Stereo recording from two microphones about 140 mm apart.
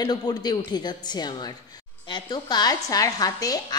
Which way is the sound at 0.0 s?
30° left (ahead or behind).